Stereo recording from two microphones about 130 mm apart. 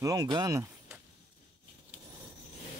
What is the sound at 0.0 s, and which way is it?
Speech, 30° right (ahead or behind).